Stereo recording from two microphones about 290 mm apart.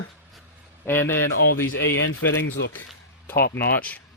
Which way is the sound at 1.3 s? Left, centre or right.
Left.